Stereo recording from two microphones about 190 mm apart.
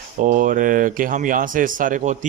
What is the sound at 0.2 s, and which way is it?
Speech, 45° right (ahead or behind).